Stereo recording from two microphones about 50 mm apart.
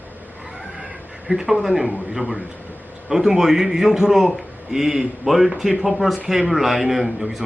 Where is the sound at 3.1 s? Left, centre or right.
Centre.